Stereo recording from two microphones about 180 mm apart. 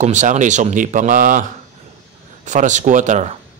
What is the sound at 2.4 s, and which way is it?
Speech, 45° right (ahead or behind).